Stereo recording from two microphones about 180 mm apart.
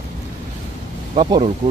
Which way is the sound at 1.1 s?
25° right (ahead or behind).